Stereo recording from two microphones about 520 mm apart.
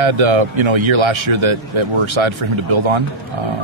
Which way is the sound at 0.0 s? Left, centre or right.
Right.